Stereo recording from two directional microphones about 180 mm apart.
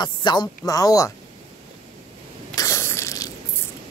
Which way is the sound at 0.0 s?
25° left (ahead or behind).